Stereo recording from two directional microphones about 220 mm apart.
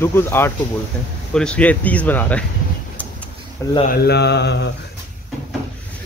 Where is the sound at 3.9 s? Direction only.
50° left (ahead or behind).